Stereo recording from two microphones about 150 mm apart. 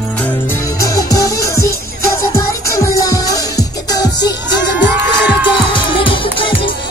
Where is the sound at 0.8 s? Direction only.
25° left (ahead or behind).